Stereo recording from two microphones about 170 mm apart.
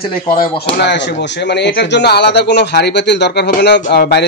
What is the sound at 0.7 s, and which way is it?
Speech, 90° left.